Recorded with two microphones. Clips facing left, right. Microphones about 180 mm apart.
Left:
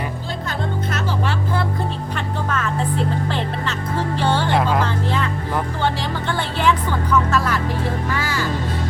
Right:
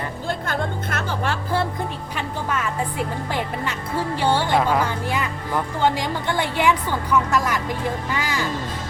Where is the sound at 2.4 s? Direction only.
10° right (ahead or behind).